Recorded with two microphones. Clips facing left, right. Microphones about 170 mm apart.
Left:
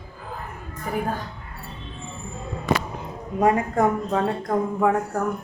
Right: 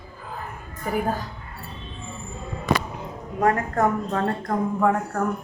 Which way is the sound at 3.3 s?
15° left (ahead or behind).